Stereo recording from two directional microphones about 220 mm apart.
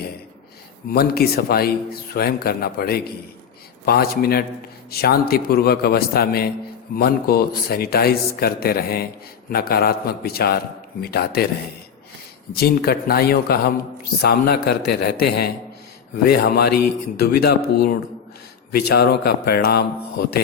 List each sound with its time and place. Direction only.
0.9 s a man's voice: 45° left (ahead or behind)
12.5 s a man's voice: 45° left (ahead or behind)
18.7 s a man's voice: 45° left (ahead or behind)